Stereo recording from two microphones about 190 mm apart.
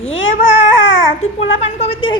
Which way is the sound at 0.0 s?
90° left.